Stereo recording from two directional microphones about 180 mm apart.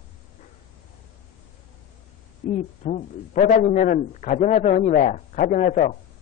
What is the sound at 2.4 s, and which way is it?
A man's voice, 40° left (ahead or behind).